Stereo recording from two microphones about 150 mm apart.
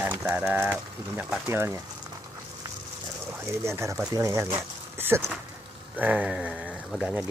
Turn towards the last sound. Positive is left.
turn(degrees=-10)  # may be behind; listen again after turning